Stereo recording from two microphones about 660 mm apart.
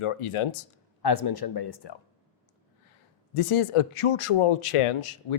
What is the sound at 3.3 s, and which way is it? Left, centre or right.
Speech, left.